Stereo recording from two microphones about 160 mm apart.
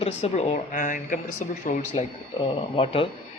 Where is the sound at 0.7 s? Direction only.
55° left (ahead or behind).